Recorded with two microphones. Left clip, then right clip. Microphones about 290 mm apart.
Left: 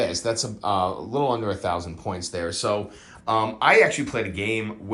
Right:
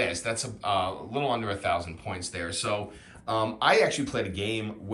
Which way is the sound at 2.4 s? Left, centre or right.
Centre.